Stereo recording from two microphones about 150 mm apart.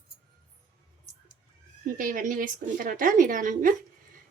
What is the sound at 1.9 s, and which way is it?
A woman's voice, 65° right (ahead or behind).